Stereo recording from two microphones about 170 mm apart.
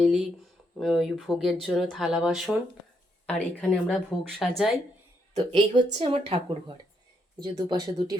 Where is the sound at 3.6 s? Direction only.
5° left (ahead or behind).